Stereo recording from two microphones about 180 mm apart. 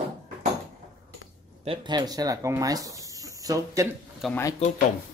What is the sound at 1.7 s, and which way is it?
Speech, 25° right (ahead or behind).